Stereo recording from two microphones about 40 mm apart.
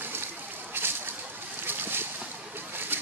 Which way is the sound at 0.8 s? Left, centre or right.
Right.